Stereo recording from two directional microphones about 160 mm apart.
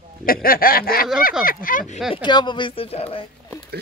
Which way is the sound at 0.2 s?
65° left (ahead or behind).